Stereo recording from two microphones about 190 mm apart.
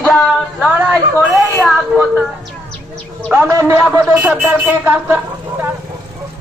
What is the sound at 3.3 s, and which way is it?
Speech, 15° right (ahead or behind).